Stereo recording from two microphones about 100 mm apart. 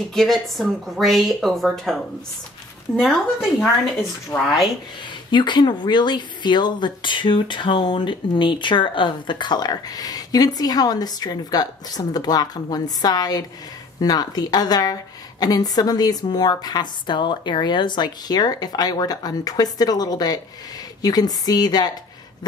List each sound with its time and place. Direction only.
0.1 s speech: 5° left (ahead or behind)
3.0 s speech: centre (ahead or behind)
4.3 s speech: 15° left (ahead or behind)
5.3 s a woman's voice: 50° left (ahead or behind)